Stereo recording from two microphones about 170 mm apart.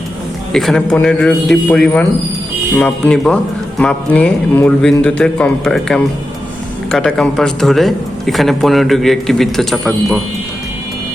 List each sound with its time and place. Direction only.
0.5 s speech: centre (ahead or behind)